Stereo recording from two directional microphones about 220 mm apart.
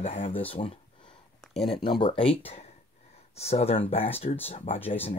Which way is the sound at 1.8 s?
20° left (ahead or behind).